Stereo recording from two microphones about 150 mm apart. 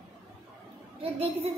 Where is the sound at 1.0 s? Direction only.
40° right (ahead or behind).